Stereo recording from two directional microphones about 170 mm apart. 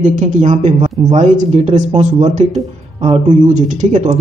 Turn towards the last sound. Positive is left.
turn(degrees=-45)  # may be behind; listen again after turning